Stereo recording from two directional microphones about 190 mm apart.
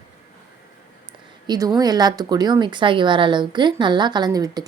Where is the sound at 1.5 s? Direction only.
20° right (ahead or behind).